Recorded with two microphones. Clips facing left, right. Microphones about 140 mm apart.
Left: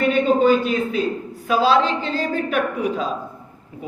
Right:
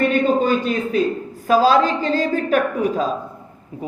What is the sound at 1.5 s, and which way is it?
Speech, 40° right (ahead or behind).